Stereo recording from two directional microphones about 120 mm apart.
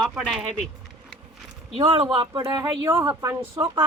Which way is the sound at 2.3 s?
35° right (ahead or behind).